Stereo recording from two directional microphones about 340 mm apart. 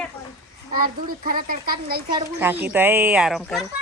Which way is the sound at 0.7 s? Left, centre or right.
Right.